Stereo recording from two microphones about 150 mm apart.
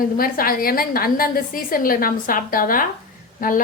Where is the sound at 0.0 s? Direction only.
75° left (ahead or behind).